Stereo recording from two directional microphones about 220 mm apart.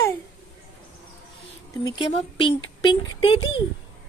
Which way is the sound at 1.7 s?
20° left (ahead or behind).